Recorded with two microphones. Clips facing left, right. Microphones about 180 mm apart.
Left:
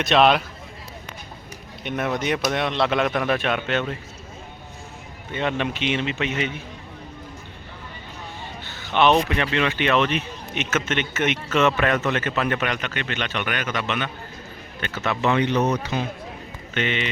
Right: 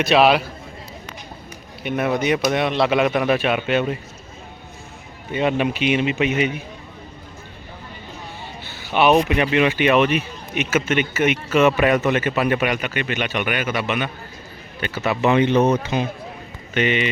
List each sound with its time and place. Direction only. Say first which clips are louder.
0.0 s a man's voice: right 2 dB; 5° right (ahead or behind)
1.8 s a man's voice: right 4 dB; 5° right (ahead or behind)
5.3 s speech: right 5 dB; 10° right (ahead or behind)
8.6 s speech: right 2 dB; 10° right (ahead or behind)
16.7 s speech: right 5 dB; 10° right (ahead or behind)